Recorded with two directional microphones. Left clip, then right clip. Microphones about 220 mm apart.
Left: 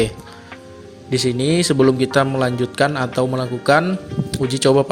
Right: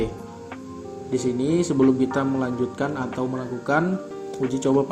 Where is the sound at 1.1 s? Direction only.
50° left (ahead or behind).